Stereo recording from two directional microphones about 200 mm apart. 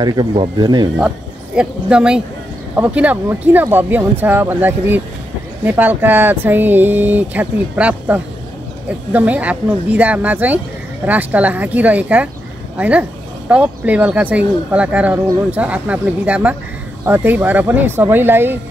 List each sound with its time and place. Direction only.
0.0 s speech: 20° right (ahead or behind)
0.9 s speech: 5° right (ahead or behind)